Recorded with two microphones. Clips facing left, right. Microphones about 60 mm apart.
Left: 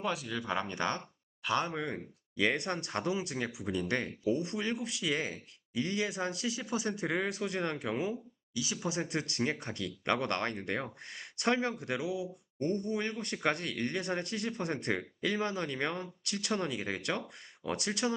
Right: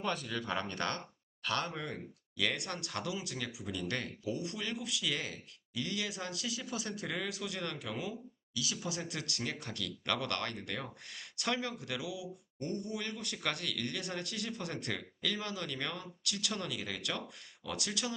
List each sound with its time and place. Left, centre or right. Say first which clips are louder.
0.0 s speech: left 2 dB; centre; by 18.1 s left